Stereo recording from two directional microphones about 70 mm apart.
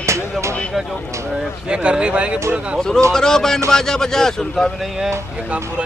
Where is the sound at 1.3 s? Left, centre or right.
Centre.